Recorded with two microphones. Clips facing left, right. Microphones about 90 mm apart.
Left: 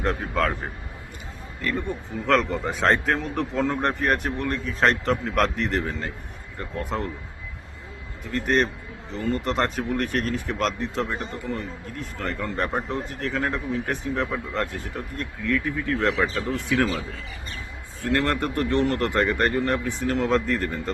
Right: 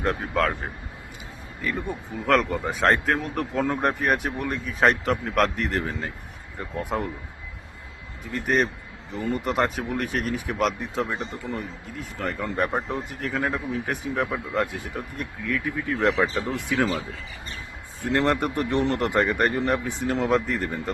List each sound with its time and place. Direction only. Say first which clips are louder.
0.0 s a man's voice: even; centre (ahead or behind)
8.3 s speech: left 1 dB; 5° right (ahead or behind)
16.5 s speech: left 1 dB; 15° right (ahead or behind)
18.0 s speech: right 1 dB; 20° right (ahead or behind)